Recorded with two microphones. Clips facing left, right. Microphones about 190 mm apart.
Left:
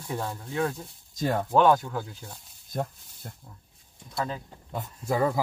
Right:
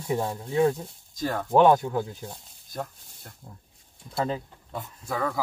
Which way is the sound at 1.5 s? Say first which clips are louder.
Right 3 dB; 15° right (ahead or behind).